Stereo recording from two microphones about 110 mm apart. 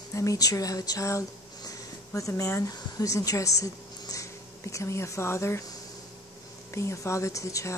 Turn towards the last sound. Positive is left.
turn(degrees=30)  # may be behind; listen again after turning